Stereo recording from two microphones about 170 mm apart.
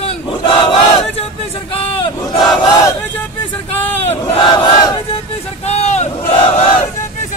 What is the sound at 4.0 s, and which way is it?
Battle cry, 30° left (ahead or behind).